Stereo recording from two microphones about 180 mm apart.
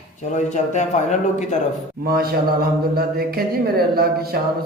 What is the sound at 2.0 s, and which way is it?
Speech, 55° right (ahead or behind).